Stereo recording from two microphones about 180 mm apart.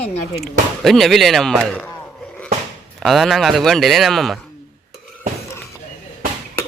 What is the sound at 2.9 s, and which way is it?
Speech, centre (ahead or behind).